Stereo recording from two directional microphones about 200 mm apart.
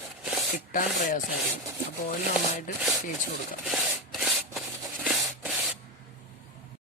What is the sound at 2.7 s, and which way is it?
Rub, 40° left (ahead or behind).